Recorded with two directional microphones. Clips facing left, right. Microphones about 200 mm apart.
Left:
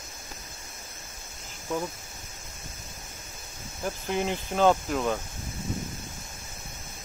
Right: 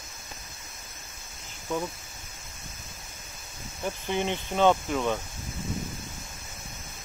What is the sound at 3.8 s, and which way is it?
Speech, 5° left (ahead or behind).